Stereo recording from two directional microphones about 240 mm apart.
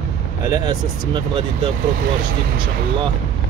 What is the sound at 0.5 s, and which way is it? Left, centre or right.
Speech, centre.